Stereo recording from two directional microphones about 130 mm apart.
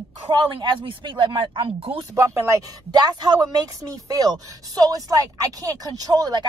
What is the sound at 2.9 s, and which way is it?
A woman's voice, 30° right (ahead or behind).